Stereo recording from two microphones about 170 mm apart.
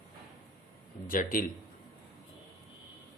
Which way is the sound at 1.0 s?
55° left (ahead or behind).